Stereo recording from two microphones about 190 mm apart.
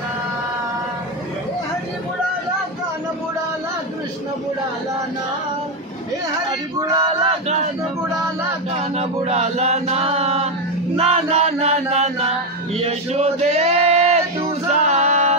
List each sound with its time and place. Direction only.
6.8 s a sound: 20° right (ahead or behind)
8.9 s chant: 35° right (ahead or behind)
12.7 s male singing: 30° right (ahead or behind)